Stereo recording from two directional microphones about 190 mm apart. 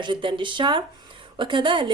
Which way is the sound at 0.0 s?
25° right (ahead or behind).